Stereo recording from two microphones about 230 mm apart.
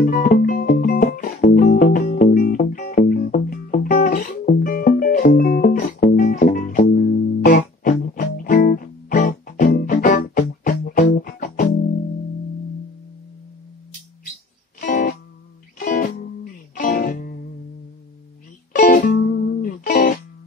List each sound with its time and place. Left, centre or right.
0.0 s music: left
14.8 s music: left
18.8 s music: left